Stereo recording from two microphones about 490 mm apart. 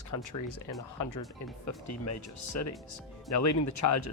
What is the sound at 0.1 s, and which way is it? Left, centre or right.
Speech, left.